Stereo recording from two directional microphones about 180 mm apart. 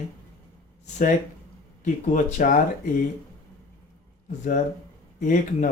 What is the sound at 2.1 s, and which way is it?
Speech, 45° left (ahead or behind).